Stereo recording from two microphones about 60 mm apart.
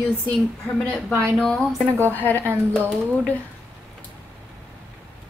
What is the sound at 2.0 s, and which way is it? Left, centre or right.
Speech, left.